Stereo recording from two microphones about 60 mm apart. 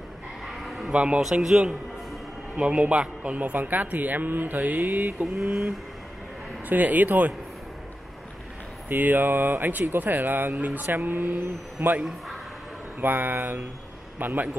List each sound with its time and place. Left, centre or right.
0.5 s sheep: centre
0.9 s speech: right
1.4 s mantra: centre
2.5 s speech: right
5.2 s mantra: centre
6.7 s speech: right
8.8 s speech: right
13.0 s speech: right